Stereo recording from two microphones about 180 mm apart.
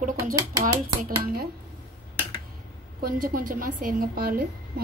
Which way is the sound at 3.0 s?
50° right (ahead or behind).